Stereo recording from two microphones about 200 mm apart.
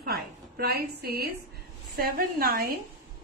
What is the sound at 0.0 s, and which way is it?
A woman's voice, 50° right (ahead or behind).